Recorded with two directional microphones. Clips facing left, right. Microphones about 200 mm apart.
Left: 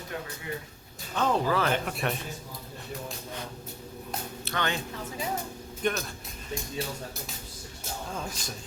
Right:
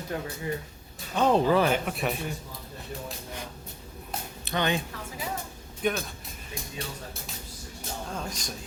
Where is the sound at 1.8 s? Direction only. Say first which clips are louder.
Right 1 dB; centre (ahead or behind).